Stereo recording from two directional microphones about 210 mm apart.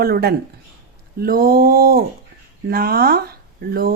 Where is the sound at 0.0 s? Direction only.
45° right (ahead or behind).